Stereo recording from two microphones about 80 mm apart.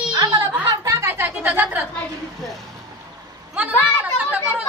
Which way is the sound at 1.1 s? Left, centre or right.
Right.